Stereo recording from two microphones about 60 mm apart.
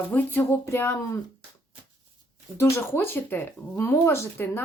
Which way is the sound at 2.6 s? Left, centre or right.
Left.